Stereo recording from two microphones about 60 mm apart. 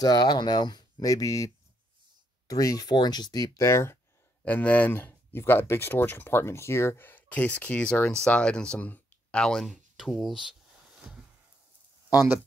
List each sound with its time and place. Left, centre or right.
0.0 s speech: left
1.0 s speech: left
2.4 s speech: left
3.6 s speech: left
4.5 s speech: left
4.9 s speech: left
7.1 s speech: left
8.7 s a sound: left
9.4 s speech: centre
12.1 s speech: right